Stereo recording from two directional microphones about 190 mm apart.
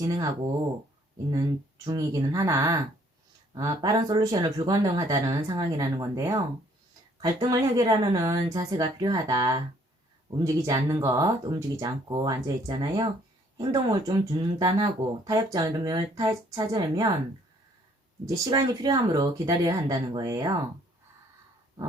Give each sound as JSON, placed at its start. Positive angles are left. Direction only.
{"t": 1.3, "sound": "speech", "side_deg": -20}
{"t": 18.3, "sound": "speech", "side_deg": -20}